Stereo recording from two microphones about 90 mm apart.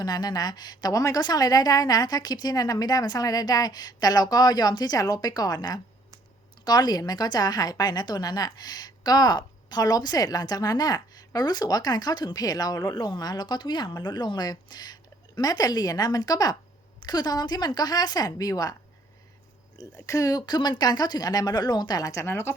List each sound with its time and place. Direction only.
0.0 s a woman's voice: 45° left (ahead or behind)
19.8 s a woman's voice: 40° left (ahead or behind)
22.3 s speech: 25° left (ahead or behind)